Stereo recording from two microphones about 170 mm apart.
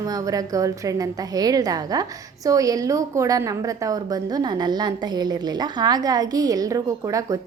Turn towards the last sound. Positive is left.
turn(degrees=-20)  # may be behind; listen again after turning